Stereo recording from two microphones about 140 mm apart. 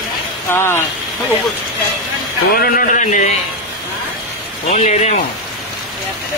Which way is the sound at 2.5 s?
90° left.